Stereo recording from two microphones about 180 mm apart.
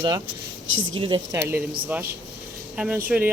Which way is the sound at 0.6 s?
90° right.